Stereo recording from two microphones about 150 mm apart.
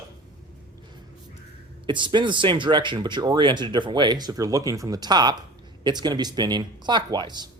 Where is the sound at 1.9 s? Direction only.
30° right (ahead or behind).